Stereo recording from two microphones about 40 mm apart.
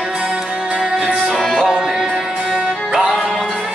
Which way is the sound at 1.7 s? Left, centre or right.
Centre.